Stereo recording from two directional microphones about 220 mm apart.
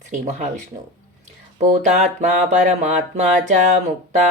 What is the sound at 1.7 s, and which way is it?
Speech, 30° right (ahead or behind).